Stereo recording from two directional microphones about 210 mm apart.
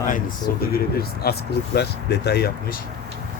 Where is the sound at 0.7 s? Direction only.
45° left (ahead or behind).